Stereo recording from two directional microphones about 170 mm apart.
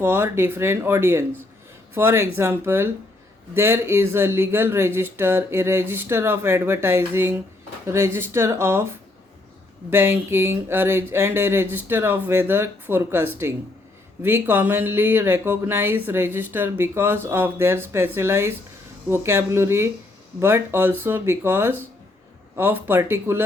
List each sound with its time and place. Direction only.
0.0 s speech: 15° right (ahead or behind)
9.9 s speech: 15° right (ahead or behind)